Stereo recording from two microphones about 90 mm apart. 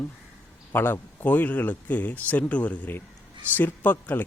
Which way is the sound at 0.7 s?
25° left (ahead or behind).